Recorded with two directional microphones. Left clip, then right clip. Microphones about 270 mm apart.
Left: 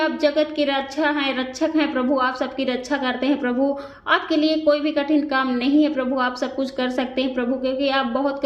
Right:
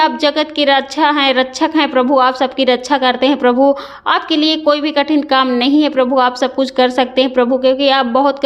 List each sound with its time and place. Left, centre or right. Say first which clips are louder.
0.0 s a woman's voice: right 6 dB; right